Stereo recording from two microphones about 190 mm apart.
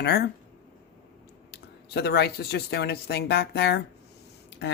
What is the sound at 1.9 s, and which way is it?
Speech, 60° left (ahead or behind).